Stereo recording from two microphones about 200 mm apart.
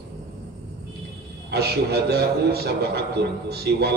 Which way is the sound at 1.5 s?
55° right (ahead or behind).